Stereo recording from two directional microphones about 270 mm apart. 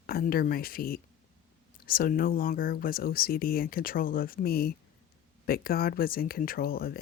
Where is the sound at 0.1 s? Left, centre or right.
Left.